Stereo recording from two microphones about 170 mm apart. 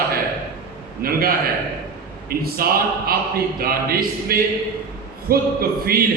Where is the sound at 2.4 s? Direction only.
60° right (ahead or behind).